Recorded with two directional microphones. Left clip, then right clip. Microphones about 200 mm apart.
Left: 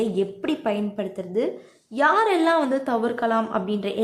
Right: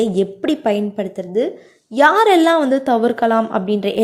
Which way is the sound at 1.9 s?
30° right (ahead or behind).